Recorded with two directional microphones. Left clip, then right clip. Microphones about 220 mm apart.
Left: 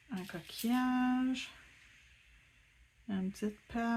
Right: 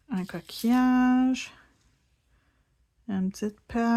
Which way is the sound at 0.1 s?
40° right (ahead or behind).